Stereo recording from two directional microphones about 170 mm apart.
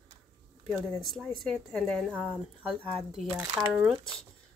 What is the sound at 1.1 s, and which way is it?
A woman's voice, centre (ahead or behind).